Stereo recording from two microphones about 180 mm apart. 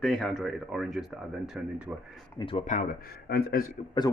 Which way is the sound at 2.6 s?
45° left (ahead or behind).